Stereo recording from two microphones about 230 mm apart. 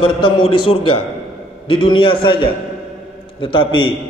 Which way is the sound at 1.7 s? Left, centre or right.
Left.